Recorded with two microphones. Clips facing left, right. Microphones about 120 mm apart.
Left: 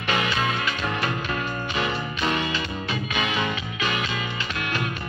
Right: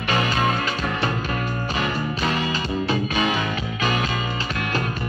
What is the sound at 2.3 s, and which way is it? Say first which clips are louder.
Music: right 3 dB; 40° right (ahead or behind).